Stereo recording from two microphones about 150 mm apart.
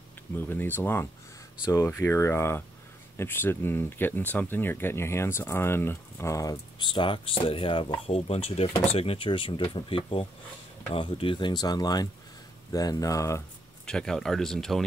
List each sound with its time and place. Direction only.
0.4 s speech: 15° left (ahead or behind)
13.8 s speech: 5° left (ahead or behind)